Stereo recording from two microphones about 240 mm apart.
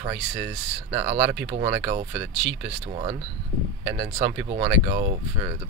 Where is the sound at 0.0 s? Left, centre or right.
Centre.